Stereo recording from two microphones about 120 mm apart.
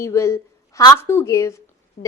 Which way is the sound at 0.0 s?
25° left (ahead or behind).